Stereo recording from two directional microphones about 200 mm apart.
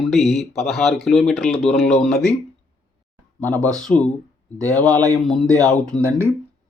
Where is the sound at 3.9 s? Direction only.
5° left (ahead or behind).